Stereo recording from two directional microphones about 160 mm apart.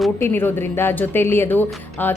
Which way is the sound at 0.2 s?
15° left (ahead or behind).